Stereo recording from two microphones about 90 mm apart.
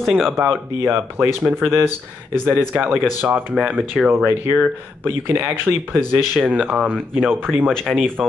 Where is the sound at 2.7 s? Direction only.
15° right (ahead or behind).